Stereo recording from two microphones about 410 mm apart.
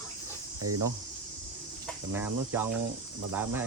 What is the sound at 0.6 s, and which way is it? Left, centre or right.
Speech, right.